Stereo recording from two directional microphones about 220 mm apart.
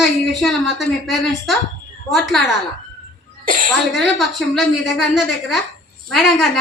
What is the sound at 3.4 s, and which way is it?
Speech, 40° right (ahead or behind).